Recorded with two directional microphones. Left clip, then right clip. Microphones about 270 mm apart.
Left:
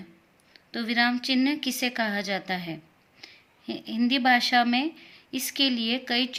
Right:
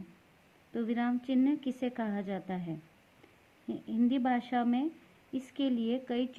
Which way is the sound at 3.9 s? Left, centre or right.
Centre.